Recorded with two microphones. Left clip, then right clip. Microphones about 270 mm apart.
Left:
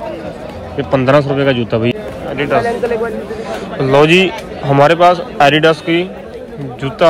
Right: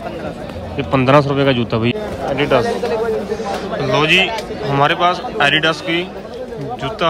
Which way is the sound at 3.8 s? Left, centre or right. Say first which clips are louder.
Left 5 dB; centre.